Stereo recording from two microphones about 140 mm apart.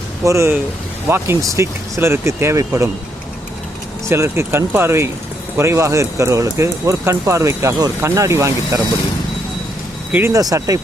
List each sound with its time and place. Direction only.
0.3 s speech: 20° right (ahead or behind)
4.1 s speech: 20° right (ahead or behind)
10.1 s speech: 15° right (ahead or behind)